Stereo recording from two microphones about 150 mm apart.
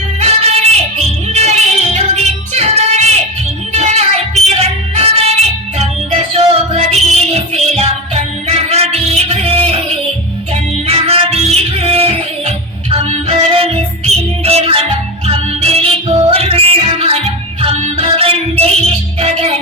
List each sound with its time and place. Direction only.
0.2 s music: 45° right (ahead or behind)